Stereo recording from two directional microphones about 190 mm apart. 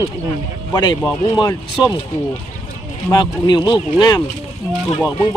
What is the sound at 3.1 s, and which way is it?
Speech, 25° left (ahead or behind).